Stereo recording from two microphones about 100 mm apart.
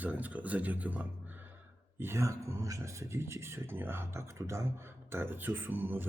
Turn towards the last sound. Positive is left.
turn(degrees=-20)  # may be behind; listen again after turning